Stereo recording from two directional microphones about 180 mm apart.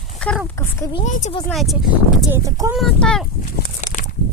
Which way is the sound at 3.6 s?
45° left (ahead or behind).